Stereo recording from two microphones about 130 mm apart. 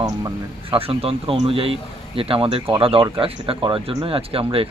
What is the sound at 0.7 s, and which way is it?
Speech, 45° right (ahead or behind).